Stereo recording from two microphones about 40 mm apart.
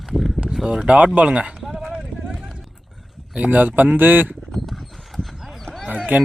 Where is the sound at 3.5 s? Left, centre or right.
Right.